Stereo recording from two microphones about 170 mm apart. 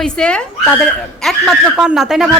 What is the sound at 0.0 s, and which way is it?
Speech, 5° left (ahead or behind).